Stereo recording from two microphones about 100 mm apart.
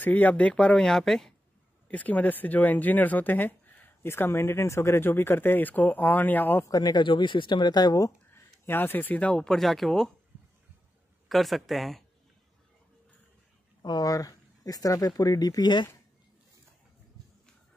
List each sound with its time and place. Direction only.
0.0 s speech: 15° left (ahead or behind)
1.9 s speech: 15° left (ahead or behind)
6.7 s speech: 45° left (ahead or behind)
8.3 s speech: 20° left (ahead or behind); by 10.1 s 5° left (ahead or behind)
11.2 s speech: centre (ahead or behind)
13.8 s speech: 40° left (ahead or behind)